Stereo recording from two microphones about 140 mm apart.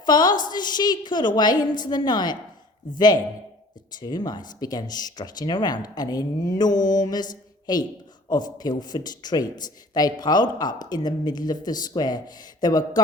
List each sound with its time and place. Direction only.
0.0 s a woman's voice: 30° left (ahead or behind)
4.0 s speech: 30° left (ahead or behind)